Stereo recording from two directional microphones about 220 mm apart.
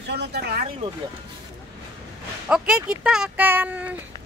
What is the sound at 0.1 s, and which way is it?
Speech, 50° right (ahead or behind).